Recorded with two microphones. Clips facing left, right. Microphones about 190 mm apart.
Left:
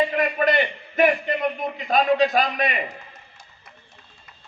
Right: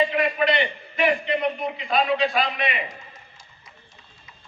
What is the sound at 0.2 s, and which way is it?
A man's voice, 45° left (ahead or behind).